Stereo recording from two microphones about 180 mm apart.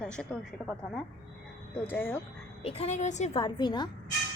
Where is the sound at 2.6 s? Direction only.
35° left (ahead or behind).